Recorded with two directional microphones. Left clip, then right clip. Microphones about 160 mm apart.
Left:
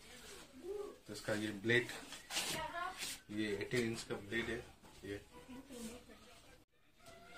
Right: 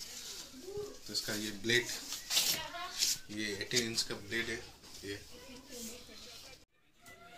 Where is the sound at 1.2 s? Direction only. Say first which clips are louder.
Left 2 dB; 25° left (ahead or behind).